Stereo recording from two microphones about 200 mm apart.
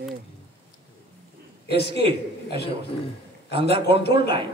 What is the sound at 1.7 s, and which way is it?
A man's voice, 55° left (ahead or behind).